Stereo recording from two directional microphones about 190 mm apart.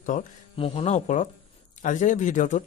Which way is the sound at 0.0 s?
45° left (ahead or behind).